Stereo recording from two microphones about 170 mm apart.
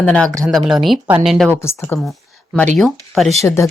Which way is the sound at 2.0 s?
Centre (ahead or behind).